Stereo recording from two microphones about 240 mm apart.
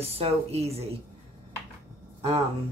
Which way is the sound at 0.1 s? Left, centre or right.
Right.